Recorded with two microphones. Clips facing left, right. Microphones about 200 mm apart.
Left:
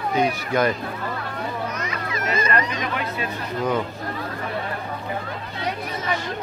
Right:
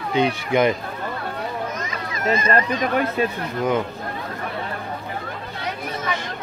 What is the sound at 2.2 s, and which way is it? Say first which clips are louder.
Speech: right 4 dB; 30° right (ahead or behind).